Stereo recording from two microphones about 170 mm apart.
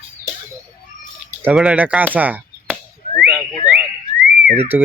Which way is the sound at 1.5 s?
5° right (ahead or behind).